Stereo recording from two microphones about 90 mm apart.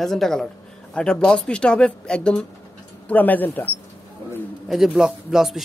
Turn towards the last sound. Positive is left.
turn(degrees=-5)  # may be behind; listen again after turning